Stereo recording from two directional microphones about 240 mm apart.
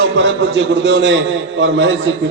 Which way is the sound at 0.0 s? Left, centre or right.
Right.